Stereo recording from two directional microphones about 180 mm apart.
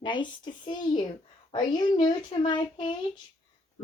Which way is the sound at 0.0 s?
25° left (ahead or behind).